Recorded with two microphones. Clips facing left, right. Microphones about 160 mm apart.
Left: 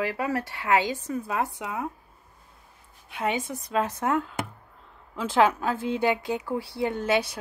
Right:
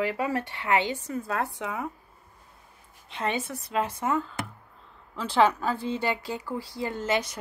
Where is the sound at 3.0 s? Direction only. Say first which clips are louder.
Left 2 dB; 10° left (ahead or behind).